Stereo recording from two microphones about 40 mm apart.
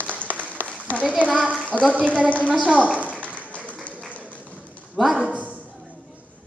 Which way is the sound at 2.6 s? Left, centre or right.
Right.